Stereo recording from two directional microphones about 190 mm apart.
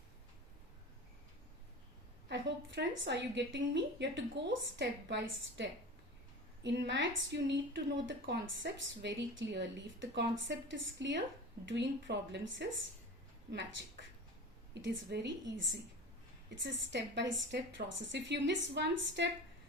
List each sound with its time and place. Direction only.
2.3 s a woman's voice: 70° right (ahead or behind)